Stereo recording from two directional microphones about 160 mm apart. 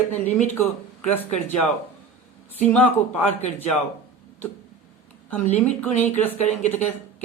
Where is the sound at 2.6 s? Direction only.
10° left (ahead or behind).